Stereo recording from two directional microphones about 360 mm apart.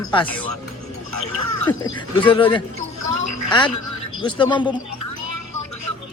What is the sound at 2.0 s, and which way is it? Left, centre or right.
Speech, centre.